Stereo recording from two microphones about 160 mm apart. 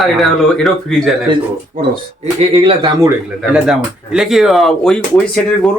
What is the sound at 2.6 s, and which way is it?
Speech, 30° right (ahead or behind).